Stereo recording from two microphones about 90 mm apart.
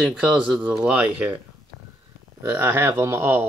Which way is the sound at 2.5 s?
25° right (ahead or behind).